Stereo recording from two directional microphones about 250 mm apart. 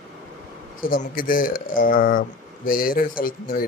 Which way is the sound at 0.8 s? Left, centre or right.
Left.